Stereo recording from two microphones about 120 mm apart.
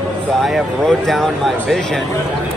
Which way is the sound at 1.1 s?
Centre (ahead or behind).